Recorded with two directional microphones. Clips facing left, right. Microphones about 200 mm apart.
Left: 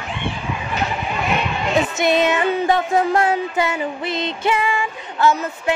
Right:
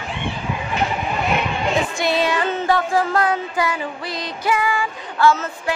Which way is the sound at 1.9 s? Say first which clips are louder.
Left 3 dB; 20° left (ahead or behind).